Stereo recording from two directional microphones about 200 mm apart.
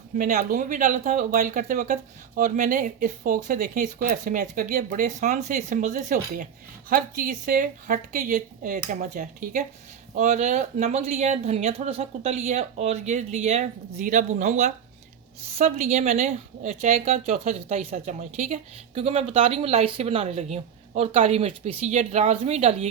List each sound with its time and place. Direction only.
0.2 s a woman's voice: 40° right (ahead or behind)